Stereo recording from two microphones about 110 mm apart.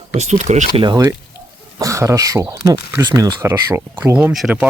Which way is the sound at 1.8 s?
30° right (ahead or behind).